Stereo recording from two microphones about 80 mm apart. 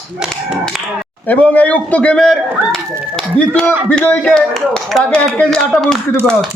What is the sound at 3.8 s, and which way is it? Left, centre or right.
Speech, centre.